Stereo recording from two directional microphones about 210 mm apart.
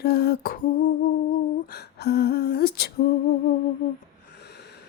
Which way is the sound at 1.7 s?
50° left (ahead or behind).